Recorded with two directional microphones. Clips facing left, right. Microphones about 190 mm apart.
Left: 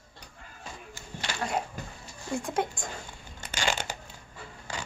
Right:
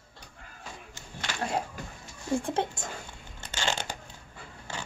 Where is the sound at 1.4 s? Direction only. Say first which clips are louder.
Even; 30° right (ahead or behind).